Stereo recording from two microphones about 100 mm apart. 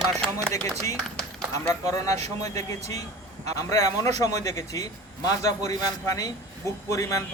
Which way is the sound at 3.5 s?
35° left (ahead or behind).